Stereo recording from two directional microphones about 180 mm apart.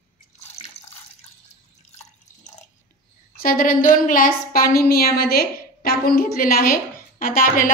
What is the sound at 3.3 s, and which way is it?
A woman's voice, 50° left (ahead or behind).